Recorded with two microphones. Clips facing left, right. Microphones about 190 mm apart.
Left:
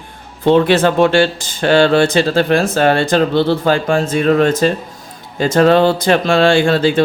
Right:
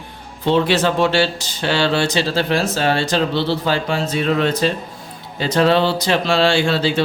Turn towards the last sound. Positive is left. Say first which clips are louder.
# left 5 dB
turn(degrees=50)  # may be behind; listen again after turning